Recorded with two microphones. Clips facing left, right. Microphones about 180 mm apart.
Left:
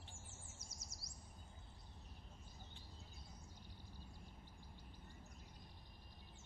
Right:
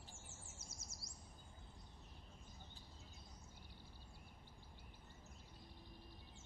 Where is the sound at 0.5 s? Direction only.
25° right (ahead or behind).